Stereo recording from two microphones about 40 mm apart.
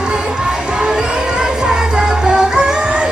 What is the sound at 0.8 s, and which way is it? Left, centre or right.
Music, right.